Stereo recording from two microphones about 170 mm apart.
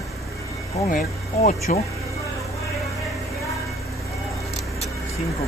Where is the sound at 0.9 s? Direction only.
55° left (ahead or behind).